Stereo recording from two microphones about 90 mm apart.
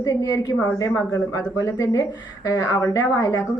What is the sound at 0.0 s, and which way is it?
A woman's voice, 40° left (ahead or behind).